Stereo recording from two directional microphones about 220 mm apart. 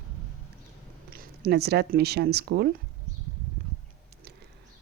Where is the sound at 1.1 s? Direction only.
45° right (ahead or behind).